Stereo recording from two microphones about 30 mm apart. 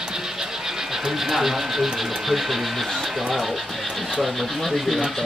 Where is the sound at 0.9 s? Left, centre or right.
Centre.